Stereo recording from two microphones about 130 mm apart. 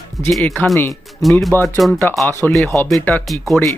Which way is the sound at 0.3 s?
5° left (ahead or behind).